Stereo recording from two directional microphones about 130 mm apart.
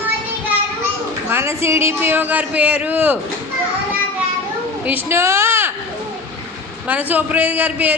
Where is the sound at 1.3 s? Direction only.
20° right (ahead or behind).